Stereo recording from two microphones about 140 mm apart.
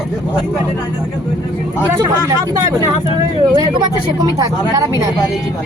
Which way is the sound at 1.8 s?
20° right (ahead or behind).